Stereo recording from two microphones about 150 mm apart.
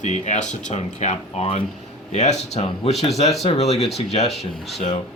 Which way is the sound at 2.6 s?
40° left (ahead or behind).